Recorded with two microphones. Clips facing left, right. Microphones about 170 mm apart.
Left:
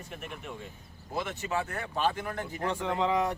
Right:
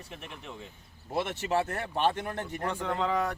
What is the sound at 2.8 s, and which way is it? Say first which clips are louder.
Speech: left 2 dB; 10° left (ahead or behind).